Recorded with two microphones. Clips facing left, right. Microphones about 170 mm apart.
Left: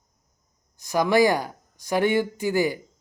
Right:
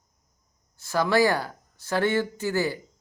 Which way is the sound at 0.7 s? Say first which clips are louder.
Left 2 dB; 15° left (ahead or behind).